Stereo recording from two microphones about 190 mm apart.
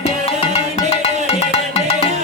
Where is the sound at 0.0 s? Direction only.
30° left (ahead or behind).